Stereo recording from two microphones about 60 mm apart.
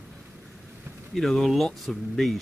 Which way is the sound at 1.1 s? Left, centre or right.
Centre.